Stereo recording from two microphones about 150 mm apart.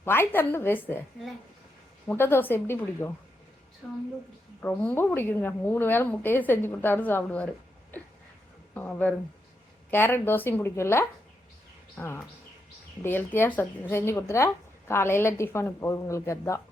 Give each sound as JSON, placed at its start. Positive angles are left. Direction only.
{"t": 0.0, "sound": "speech", "side_deg": 15}
{"t": 2.0, "sound": "speech", "side_deg": 15}
{"t": 3.8, "sound": "a woman's voice", "side_deg": 5}
{"t": 8.7, "sound": "speech", "side_deg": 10}